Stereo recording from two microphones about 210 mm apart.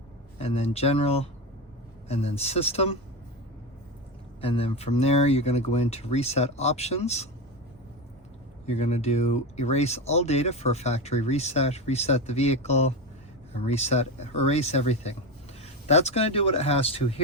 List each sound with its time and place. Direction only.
0.3 s speech: 30° left (ahead or behind)
4.4 s speech: 25° left (ahead or behind)
8.6 s speech: 30° left (ahead or behind)